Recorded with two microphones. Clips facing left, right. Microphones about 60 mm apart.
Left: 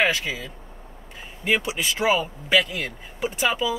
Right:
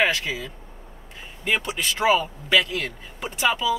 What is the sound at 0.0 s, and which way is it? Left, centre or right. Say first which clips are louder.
A man's voice: even; centre.